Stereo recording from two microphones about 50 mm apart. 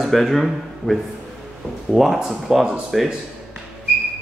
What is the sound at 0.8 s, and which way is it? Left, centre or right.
A man's voice, centre.